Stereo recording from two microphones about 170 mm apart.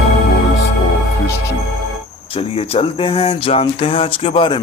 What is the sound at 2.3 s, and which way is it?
A man's voice, 35° left (ahead or behind).